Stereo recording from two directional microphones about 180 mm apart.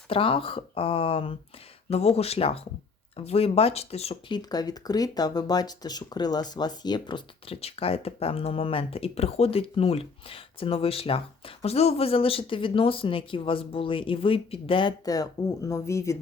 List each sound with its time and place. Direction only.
0.1 s speech: 30° left (ahead or behind)
4.4 s speech: 20° left (ahead or behind)